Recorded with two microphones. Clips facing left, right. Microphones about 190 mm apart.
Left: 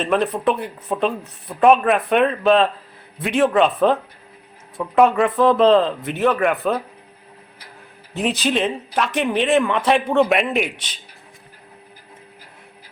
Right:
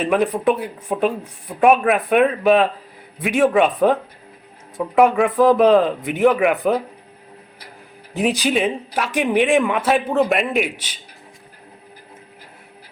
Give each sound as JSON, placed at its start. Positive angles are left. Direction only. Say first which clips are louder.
{"t": 0.0, "sound": "speech", "louder": "right 2 dB", "side_deg": -10}
{"t": 8.1, "sound": "speech", "louder": "right 2 dB", "side_deg": -10}